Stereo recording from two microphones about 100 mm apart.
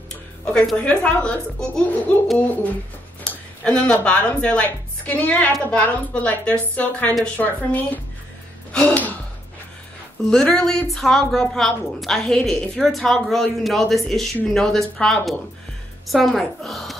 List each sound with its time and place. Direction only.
0.5 s a woman's voice: 10° left (ahead or behind)
2.3 s a woman's voice: 15° left (ahead or behind)
8.7 s gasp: 15° left (ahead or behind)
10.3 s a woman's voice: 5° left (ahead or behind)